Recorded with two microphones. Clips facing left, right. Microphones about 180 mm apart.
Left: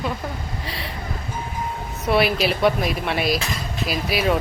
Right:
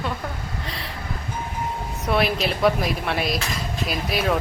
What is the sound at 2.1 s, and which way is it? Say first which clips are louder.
Speech: left 3 dB; centre (ahead or behind).